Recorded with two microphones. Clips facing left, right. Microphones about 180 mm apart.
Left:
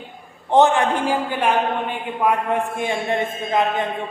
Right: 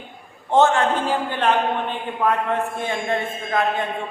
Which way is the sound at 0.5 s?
15° left (ahead or behind).